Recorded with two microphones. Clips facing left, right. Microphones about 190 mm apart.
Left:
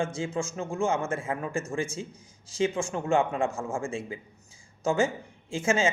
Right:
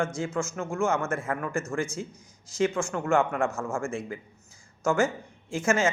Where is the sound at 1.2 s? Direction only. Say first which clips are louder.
Right 1 dB; 25° left (ahead or behind).